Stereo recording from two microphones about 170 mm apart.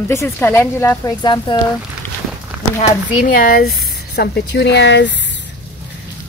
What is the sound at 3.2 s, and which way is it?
Speech, 55° left (ahead or behind).